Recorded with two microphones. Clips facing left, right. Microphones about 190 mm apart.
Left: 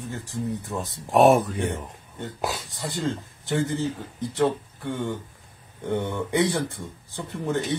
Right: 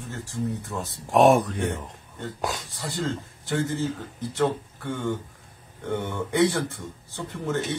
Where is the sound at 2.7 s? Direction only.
15° left (ahead or behind).